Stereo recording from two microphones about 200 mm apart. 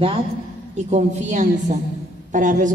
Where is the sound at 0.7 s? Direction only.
35° right (ahead or behind).